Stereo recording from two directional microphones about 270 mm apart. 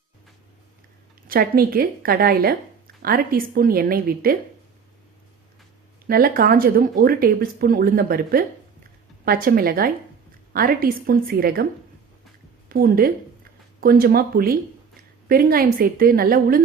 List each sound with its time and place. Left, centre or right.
1.3 s a woman's voice: right
6.1 s a woman's voice: right
12.6 s a woman's voice: right